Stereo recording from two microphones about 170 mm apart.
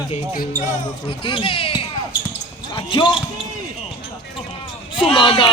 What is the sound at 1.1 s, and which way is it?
Speech, 30° left (ahead or behind).